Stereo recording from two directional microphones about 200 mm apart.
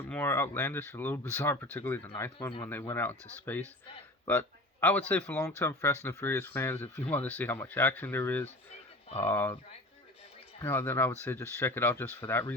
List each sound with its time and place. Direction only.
0.1 s speech: 10° left (ahead or behind)
10.6 s speech: 10° left (ahead or behind)